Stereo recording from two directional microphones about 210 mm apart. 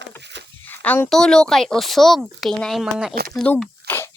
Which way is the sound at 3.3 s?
5° left (ahead or behind).